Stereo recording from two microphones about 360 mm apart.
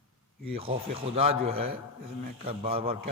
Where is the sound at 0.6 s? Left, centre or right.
Centre.